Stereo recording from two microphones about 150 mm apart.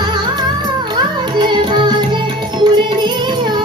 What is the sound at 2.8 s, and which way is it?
Carnatic music, 30° right (ahead or behind).